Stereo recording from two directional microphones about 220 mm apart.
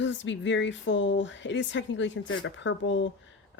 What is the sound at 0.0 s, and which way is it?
Speech, 55° left (ahead or behind).